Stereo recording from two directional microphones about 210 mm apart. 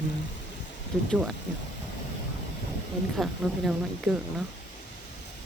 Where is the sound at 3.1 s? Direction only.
5° right (ahead or behind).